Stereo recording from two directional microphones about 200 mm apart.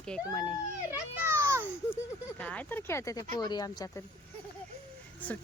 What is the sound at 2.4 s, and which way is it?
A woman's voice, 5° left (ahead or behind).